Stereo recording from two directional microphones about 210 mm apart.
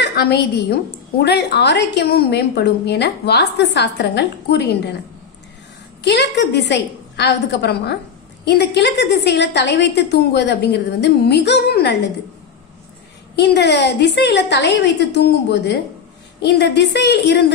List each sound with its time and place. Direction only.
0.0 s a woman's voice: 50° left (ahead or behind)
6.0 s a woman's voice: 55° left (ahead or behind)
13.4 s a woman's voice: 50° left (ahead or behind)